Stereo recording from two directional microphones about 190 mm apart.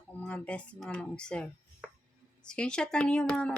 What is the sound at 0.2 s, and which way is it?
Speech, 5° left (ahead or behind).